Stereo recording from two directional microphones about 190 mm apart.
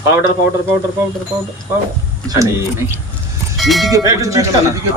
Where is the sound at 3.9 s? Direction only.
15° right (ahead or behind).